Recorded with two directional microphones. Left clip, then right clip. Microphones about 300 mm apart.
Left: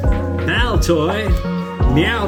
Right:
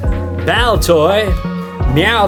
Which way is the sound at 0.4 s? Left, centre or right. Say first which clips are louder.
Right 7 dB; right.